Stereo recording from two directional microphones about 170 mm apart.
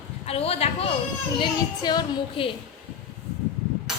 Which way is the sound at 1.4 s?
25° left (ahead or behind).